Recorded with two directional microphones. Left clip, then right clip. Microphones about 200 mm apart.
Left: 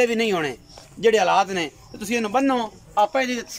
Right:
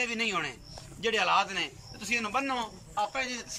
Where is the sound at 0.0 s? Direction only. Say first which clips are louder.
Left 10 dB; 40° left (ahead or behind).